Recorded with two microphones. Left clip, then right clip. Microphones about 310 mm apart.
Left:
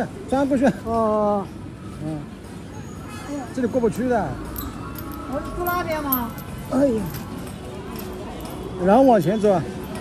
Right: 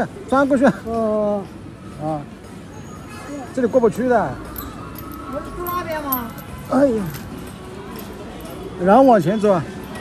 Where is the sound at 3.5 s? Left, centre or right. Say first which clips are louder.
Right 6 dB; right.